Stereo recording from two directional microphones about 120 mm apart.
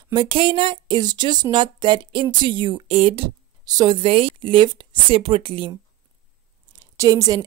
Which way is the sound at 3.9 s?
50° right (ahead or behind).